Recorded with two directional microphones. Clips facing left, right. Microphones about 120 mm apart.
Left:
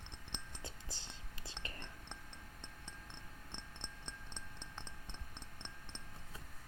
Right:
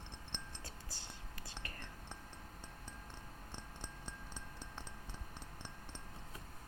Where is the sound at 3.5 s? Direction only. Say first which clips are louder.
Right 1 dB; 5° right (ahead or behind).